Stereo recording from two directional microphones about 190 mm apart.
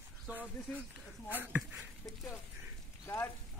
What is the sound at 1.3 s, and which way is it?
Speech, 10° right (ahead or behind).